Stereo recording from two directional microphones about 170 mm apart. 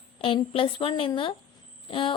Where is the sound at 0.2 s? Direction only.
30° left (ahead or behind).